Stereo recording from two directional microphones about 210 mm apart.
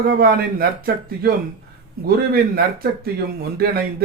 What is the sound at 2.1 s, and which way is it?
A man's voice, 45° right (ahead or behind).